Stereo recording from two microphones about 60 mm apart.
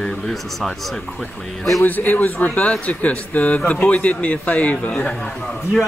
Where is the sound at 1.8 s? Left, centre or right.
Left.